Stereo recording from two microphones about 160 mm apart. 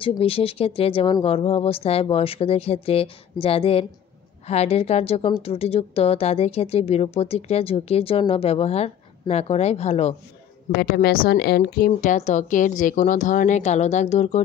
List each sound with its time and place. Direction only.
0.0 s a woman's voice: 35° left (ahead or behind)
10.8 s speech: 80° left
12.0 s speech: 50° left (ahead or behind)